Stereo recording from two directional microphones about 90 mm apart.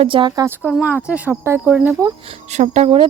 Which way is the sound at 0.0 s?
75° right (ahead or behind).